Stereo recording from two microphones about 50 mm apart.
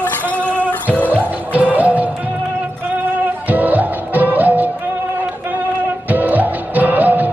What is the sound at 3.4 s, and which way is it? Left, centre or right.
Music, right.